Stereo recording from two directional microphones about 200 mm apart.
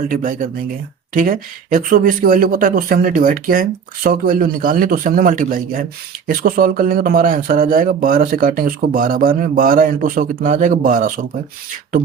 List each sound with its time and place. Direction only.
0.1 s speech: 45° right (ahead or behind)